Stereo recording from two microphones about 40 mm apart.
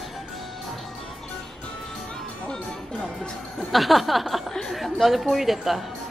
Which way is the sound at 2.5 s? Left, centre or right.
Left.